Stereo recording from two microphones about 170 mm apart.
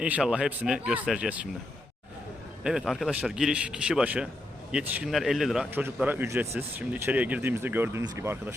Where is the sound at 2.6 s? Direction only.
5° right (ahead or behind).